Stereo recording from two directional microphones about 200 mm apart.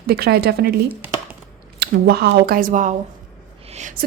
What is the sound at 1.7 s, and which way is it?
A woman's voice, 50° right (ahead or behind).